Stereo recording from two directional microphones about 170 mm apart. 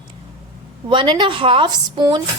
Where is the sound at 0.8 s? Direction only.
25° right (ahead or behind).